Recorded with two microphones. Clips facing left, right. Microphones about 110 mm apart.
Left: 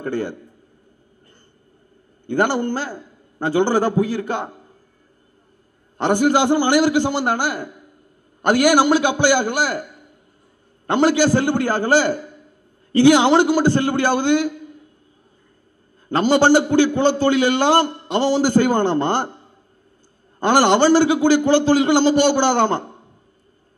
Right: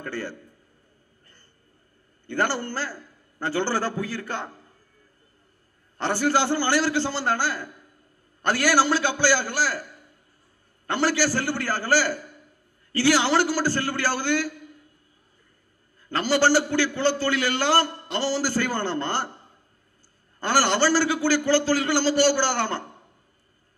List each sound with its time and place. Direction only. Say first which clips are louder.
0.0 s a man's voice: left 8 dB; 20° left (ahead or behind)
2.2 s a man's voice: left 7 dB; 15° left (ahead or behind)
5.9 s a man's voice: left 6 dB; 20° left (ahead or behind)
16.1 s a man's voice: left 6 dB; 20° left (ahead or behind)
20.3 s a man's voice: left 7 dB; 20° left (ahead or behind)